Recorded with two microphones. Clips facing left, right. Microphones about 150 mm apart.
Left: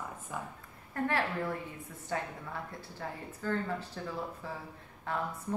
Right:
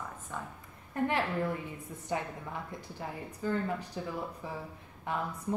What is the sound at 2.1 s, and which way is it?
Speech, 15° right (ahead or behind).